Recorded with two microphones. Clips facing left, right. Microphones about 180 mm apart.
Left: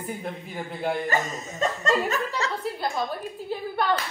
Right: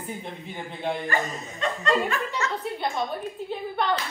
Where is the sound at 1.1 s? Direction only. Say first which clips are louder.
Left 1 dB; 45° left (ahead or behind).